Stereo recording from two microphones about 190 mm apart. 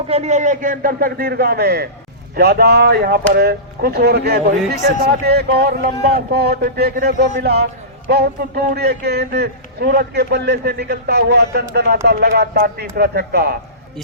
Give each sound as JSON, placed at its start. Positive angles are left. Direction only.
{"t": 0.1, "sound": "a man's voice", "side_deg": -35}